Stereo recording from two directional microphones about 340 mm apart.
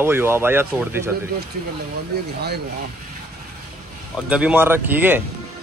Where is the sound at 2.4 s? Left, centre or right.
Right.